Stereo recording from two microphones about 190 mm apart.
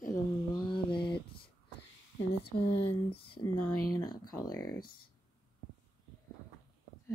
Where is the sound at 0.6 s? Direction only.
25° left (ahead or behind).